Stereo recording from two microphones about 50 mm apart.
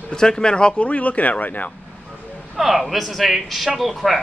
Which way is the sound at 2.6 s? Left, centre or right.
Centre.